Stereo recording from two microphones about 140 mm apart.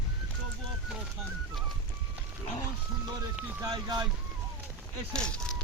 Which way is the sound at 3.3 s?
10° right (ahead or behind).